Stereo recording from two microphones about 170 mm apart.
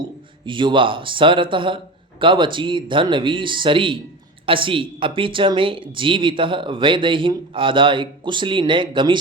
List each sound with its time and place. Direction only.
0.4 s a woman's voice: 30° right (ahead or behind)